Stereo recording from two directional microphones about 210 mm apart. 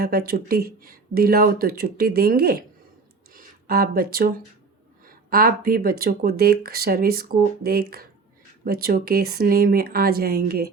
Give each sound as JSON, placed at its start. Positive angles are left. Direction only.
{"t": 0.0, "sound": "speech", "side_deg": -45}